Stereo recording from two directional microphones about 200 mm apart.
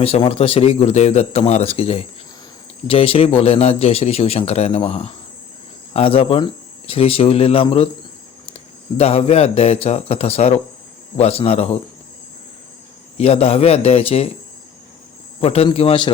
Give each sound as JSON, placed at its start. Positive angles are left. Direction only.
{"t": 0.0, "sound": "a man's voice", "side_deg": 30}
{"t": 9.0, "sound": "a man's voice", "side_deg": 30}
{"t": 13.1, "sound": "a man's voice", "side_deg": 30}
{"t": 15.4, "sound": "speech", "side_deg": 30}